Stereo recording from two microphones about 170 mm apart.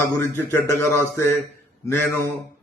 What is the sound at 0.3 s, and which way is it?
A man's voice, 15° left (ahead or behind).